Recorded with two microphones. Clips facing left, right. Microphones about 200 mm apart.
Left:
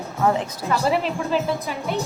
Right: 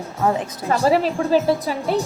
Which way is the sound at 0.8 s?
40° right (ahead or behind).